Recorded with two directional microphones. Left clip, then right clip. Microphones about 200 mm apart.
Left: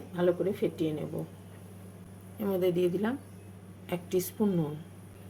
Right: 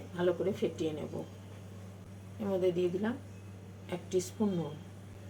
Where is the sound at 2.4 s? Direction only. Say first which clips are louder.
Left 3 dB; 40° left (ahead or behind).